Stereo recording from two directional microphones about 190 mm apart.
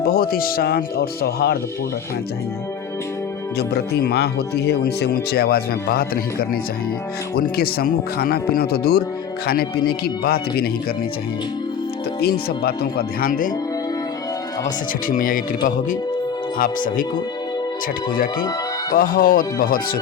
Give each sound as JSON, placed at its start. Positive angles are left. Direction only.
{"t": 0.0, "sound": "speech", "side_deg": 50}
{"t": 3.6, "sound": "speech", "side_deg": 60}
{"t": 7.3, "sound": "speech", "side_deg": 50}
{"t": 12.2, "sound": "speech", "side_deg": 55}
{"t": 14.6, "sound": "speech", "side_deg": 45}
{"t": 18.9, "sound": "speech", "side_deg": 45}